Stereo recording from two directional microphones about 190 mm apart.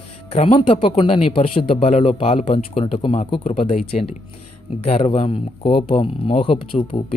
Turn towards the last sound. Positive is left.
turn(degrees=30)  # may be behind; listen again after turning